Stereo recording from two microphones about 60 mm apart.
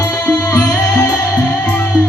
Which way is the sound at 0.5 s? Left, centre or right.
Centre.